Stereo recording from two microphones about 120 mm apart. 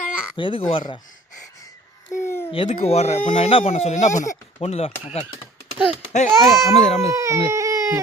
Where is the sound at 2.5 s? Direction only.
55° left (ahead or behind); by 4.2 s 80° left.